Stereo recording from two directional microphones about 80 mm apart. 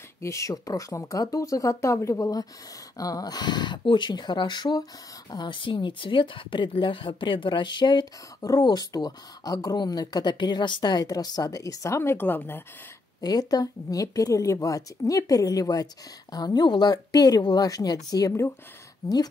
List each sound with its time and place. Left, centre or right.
0.2 s speech: left
5.3 s speech: left
13.2 s speech: left